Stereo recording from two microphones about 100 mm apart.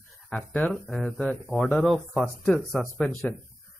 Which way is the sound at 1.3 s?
10° left (ahead or behind).